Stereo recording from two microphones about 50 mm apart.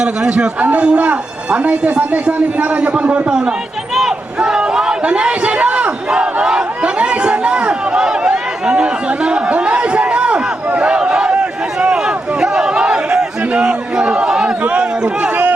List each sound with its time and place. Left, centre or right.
0.0 s a man's voice: centre
6.1 s crowd: centre
11.8 s a sound: centre